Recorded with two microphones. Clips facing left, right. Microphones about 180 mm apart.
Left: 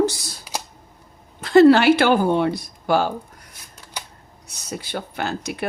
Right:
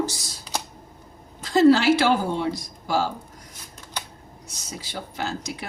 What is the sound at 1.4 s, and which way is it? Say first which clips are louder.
Speech: left 4 dB; 65° left (ahead or behind).